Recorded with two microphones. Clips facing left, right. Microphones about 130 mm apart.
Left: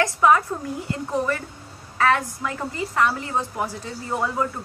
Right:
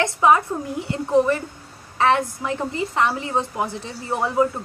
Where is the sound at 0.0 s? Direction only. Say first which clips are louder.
Right 1 dB; 20° right (ahead or behind).